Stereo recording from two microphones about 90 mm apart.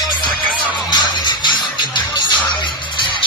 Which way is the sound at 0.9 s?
60° left (ahead or behind).